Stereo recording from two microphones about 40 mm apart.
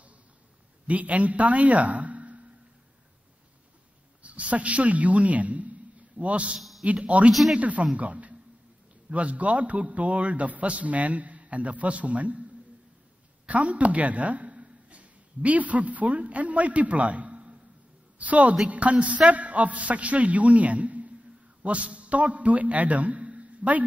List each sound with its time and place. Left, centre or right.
0.8 s a man's voice: right
4.2 s a woman's voice: right
13.5 s a woman's voice: right